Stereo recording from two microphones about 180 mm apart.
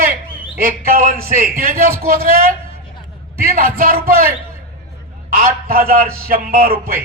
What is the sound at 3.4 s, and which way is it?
Speech, 55° right (ahead or behind).